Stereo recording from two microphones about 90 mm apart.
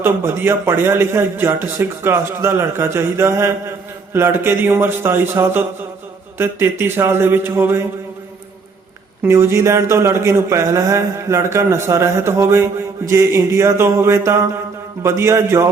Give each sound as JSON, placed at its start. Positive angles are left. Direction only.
{"t": 0.0, "sound": "a man's voice", "side_deg": -25}
{"t": 9.2, "sound": "speech", "side_deg": -30}